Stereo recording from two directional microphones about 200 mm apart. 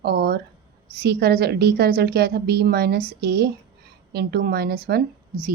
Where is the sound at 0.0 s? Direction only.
55° right (ahead or behind).